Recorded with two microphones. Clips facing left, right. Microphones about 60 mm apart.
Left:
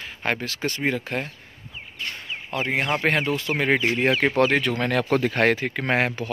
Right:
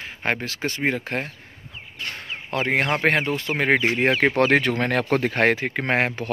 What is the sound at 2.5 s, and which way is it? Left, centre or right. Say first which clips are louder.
Speech: right 2 dB; right.